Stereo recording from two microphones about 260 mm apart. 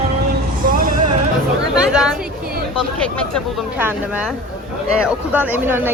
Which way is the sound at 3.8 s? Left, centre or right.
Centre.